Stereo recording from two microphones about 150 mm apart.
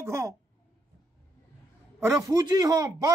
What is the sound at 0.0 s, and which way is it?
Speech, 20° right (ahead or behind).